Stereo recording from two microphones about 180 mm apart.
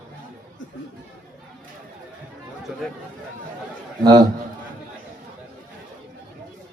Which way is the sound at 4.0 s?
25° right (ahead or behind).